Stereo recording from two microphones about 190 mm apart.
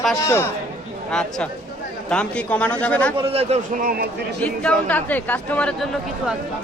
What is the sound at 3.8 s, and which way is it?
Speech, 50° right (ahead or behind).